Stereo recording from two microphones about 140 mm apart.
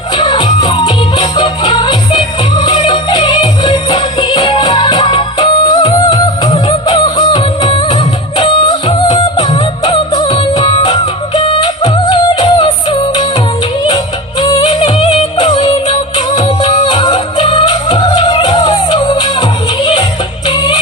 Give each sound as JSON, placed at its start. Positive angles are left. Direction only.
{"t": 0.2, "sound": "music", "side_deg": 30}
{"t": 14.4, "sound": "music", "side_deg": 30}
{"t": 18.2, "sound": "music", "side_deg": 35}